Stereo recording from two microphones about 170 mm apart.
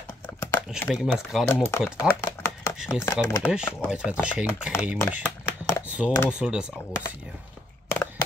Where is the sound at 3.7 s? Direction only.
5° right (ahead or behind).